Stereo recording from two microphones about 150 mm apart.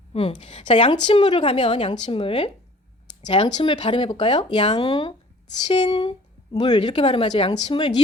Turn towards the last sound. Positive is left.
turn(degrees=35)  # may be behind; listen again after turning